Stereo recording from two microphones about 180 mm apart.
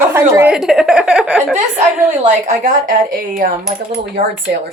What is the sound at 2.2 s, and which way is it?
A woman's voice, 40° right (ahead or behind).